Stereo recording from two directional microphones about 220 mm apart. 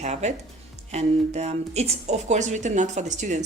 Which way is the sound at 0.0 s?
30° right (ahead or behind).